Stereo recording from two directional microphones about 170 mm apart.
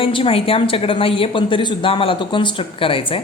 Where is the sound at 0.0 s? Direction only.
30° left (ahead or behind).